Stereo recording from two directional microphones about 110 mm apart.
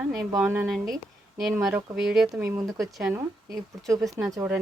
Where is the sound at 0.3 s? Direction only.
20° right (ahead or behind).